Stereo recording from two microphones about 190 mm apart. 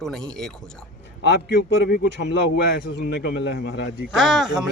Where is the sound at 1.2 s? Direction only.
60° left (ahead or behind).